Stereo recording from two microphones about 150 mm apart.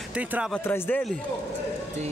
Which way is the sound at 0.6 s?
15° left (ahead or behind).